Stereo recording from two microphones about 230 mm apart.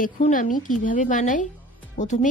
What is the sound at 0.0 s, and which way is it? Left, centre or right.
Speech, left.